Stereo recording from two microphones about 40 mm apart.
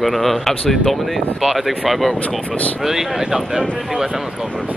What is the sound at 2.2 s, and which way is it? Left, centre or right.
Speech, left.